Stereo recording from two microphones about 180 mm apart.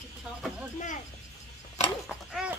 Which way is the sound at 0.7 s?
45° left (ahead or behind).